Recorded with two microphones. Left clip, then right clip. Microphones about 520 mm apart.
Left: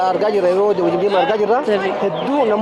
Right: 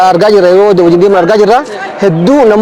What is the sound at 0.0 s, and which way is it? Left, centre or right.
A man's voice, right.